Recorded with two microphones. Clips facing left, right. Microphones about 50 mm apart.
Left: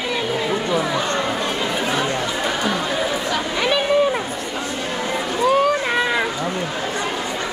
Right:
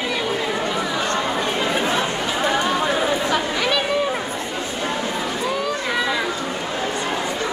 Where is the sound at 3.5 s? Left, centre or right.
Centre.